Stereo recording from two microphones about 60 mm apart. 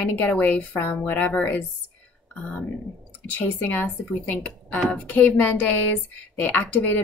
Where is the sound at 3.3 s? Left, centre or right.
Left.